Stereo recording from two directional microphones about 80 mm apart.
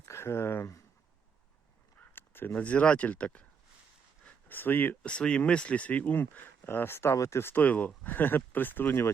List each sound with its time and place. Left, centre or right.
0.1 s speech: left
2.1 s a sound: left
2.6 s speech: centre
4.2 s a sound: left
5.0 s speech: centre; by 7.1 s left
7.1 s speech: left